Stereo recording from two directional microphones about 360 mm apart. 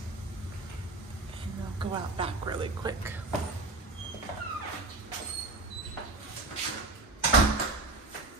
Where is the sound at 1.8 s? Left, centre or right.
Centre.